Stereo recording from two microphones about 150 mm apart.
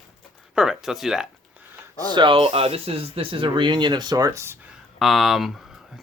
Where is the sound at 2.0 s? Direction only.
30° right (ahead or behind).